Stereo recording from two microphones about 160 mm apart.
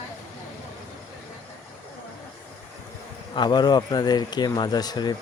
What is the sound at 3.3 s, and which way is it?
Speech, 30° left (ahead or behind).